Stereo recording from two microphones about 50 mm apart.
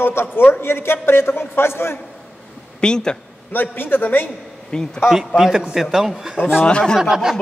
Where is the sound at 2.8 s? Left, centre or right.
Centre.